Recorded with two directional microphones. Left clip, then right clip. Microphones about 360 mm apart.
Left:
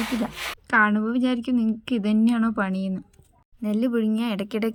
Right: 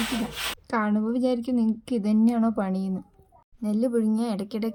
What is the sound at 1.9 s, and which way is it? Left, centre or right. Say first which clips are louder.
Speech: left 1 dB; centre.